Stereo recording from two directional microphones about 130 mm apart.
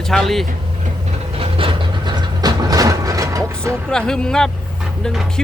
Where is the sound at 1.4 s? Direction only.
45° right (ahead or behind); by 3.8 s 25° right (ahead or behind).